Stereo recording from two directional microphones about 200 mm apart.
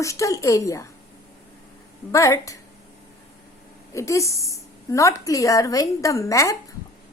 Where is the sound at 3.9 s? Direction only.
15° left (ahead or behind).